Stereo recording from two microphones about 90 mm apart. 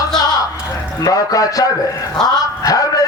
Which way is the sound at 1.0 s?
40° left (ahead or behind).